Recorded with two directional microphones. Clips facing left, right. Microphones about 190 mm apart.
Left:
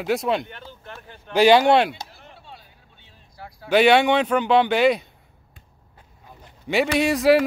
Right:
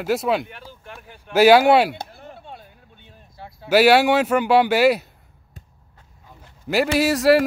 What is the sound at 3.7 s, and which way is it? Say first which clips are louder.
Speech: right 1 dB; 5° right (ahead or behind).